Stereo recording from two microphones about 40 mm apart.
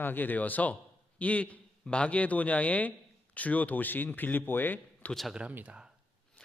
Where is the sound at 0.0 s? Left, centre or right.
Left.